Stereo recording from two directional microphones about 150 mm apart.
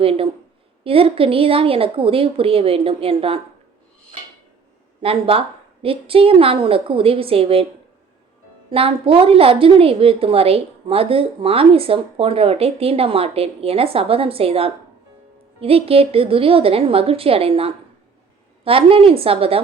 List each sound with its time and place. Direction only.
0.0 s a woman's voice: 40° right (ahead or behind)
5.0 s a woman's voice: 40° right (ahead or behind)
8.7 s a woman's voice: 40° right (ahead or behind)